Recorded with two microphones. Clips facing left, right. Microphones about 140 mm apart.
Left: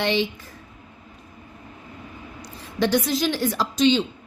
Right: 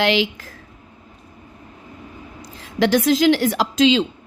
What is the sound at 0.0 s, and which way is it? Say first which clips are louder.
Speech: right 4 dB; 90° right.